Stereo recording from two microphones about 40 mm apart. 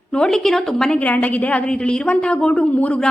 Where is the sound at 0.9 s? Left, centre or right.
Left.